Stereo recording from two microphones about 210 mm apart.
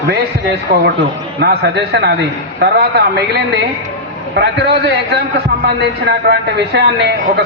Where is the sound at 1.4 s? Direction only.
50° right (ahead or behind).